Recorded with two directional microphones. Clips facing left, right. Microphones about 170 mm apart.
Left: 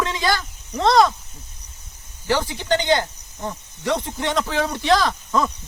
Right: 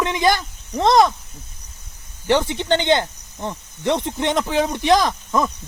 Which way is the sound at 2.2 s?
25° right (ahead or behind).